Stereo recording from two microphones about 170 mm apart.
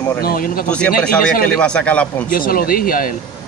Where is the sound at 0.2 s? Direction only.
60° left (ahead or behind).